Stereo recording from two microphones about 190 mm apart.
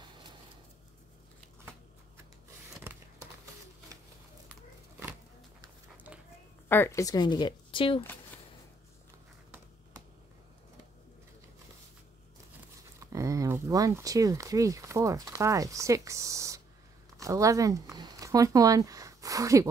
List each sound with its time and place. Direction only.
6.7 s speech: 15° left (ahead or behind)
13.0 s speech: 15° right (ahead or behind)